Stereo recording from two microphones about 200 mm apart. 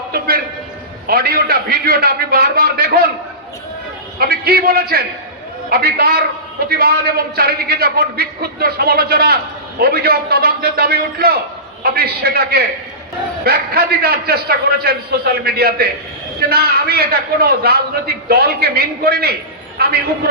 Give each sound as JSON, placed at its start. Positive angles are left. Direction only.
{"t": 1.0, "sound": "a man's voice", "side_deg": -50}
{"t": 4.2, "sound": "a man's voice", "side_deg": -50}